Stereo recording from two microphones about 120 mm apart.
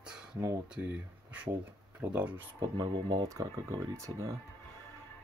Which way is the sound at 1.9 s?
10° right (ahead or behind).